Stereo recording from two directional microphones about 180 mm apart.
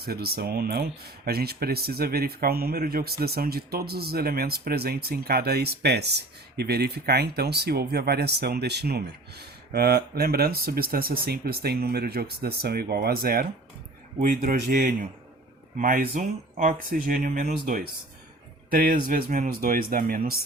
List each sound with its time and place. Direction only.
0.0 s speech: 60° right (ahead or behind)
14.2 s speech: 45° right (ahead or behind)